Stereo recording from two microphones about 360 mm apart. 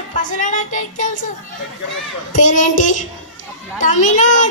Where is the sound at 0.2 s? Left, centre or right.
Left.